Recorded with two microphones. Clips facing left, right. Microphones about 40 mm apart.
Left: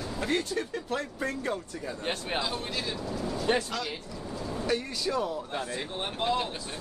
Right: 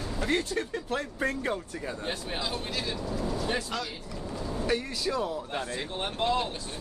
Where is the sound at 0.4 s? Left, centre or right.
Centre.